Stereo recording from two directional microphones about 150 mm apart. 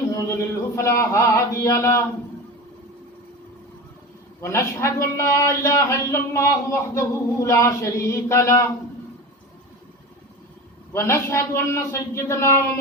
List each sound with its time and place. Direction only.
0.1 s a sound: 20° left (ahead or behind)
0.8 s a man's voice: 20° left (ahead or behind)
4.4 s a man's voice: 20° left (ahead or behind)
10.9 s a man's voice: 20° left (ahead or behind)